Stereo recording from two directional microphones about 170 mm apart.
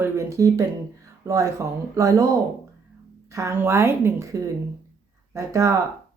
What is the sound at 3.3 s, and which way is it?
A woman's voice, 15° right (ahead or behind).